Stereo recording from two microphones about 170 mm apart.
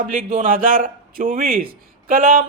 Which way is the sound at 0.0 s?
50° right (ahead or behind).